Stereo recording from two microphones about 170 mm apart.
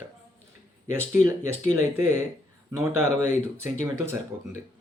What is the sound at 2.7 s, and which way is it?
Speech, 15° right (ahead or behind).